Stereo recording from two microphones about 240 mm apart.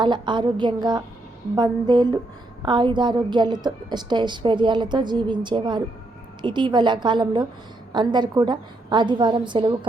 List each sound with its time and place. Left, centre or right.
0.0 s a woman's voice: centre